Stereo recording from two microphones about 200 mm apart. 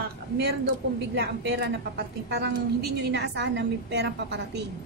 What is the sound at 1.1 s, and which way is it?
A woman's voice, 60° right (ahead or behind).